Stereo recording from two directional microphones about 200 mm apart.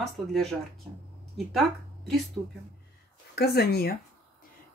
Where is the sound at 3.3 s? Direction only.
55° left (ahead or behind).